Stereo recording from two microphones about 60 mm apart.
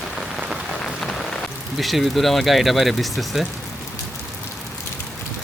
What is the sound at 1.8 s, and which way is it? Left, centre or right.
Speech, centre.